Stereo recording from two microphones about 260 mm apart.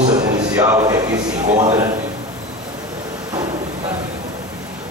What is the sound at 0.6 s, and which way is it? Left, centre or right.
Speech, centre.